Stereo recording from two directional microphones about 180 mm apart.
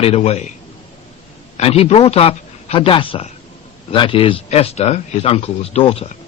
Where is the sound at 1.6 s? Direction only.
35° left (ahead or behind).